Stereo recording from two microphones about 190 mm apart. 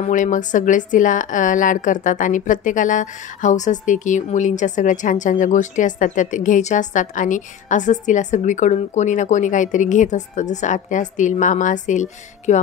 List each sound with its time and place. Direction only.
0.1 s a woman's voice: 40° left (ahead or behind)